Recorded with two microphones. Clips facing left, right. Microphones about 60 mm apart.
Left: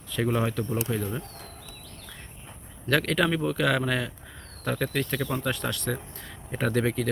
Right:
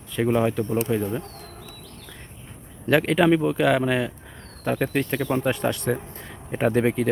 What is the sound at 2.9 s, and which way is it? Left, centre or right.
Speech, centre.